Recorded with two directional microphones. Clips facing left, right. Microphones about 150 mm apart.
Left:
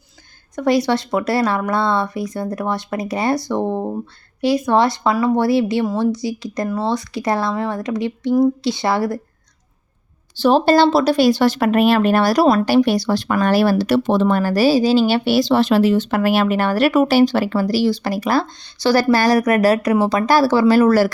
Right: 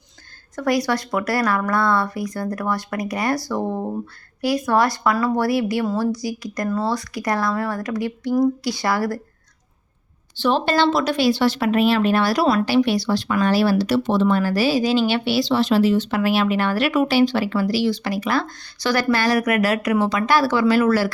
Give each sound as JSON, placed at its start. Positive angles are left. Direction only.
{"t": 0.5, "sound": "a woman's voice", "side_deg": 25}
{"t": 10.3, "sound": "speech", "side_deg": 40}
{"t": 18.4, "sound": "speech", "side_deg": 25}